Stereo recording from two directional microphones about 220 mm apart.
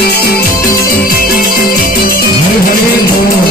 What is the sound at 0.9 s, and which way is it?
Music, 40° left (ahead or behind).